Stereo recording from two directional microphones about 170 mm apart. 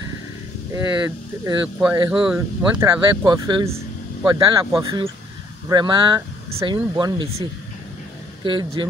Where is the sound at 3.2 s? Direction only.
25° right (ahead or behind).